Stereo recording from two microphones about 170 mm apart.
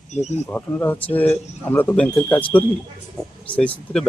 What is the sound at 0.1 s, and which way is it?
Speech, 40° left (ahead or behind).